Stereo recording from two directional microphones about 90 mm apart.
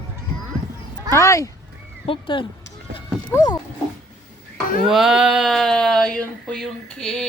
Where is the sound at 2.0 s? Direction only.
75° left (ahead or behind).